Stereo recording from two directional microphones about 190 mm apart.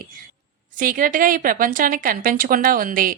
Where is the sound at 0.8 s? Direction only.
45° right (ahead or behind).